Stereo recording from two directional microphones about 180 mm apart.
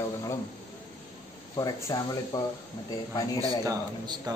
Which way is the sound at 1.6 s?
20° left (ahead or behind).